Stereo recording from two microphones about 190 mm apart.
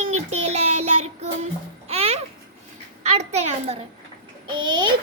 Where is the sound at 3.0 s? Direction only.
35° right (ahead or behind).